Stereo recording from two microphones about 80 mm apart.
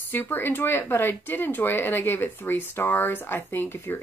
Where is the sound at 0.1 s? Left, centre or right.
Left.